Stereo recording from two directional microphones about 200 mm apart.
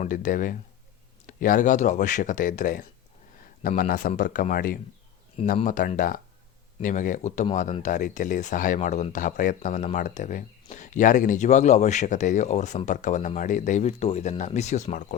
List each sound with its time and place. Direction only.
0.0 s a man's voice: 40° left (ahead or behind)